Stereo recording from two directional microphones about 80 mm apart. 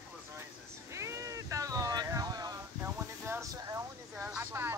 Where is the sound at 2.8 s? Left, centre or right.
Right.